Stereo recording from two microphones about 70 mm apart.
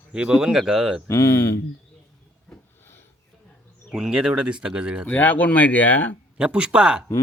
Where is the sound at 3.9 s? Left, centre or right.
Centre.